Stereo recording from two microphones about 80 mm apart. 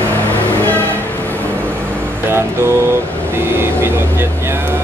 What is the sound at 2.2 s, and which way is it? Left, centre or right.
Music, right.